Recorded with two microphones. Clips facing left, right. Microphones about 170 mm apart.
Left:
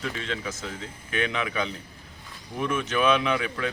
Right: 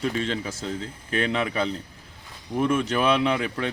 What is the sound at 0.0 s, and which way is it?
Speech, 35° right (ahead or behind).